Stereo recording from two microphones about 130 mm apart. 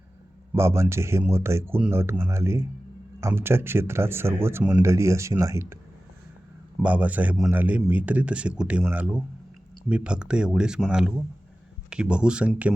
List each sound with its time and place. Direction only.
0.5 s a man's voice: 20° right (ahead or behind)
6.8 s speech: 10° right (ahead or behind)